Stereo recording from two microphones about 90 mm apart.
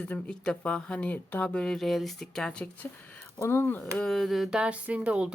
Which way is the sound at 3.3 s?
30° left (ahead or behind).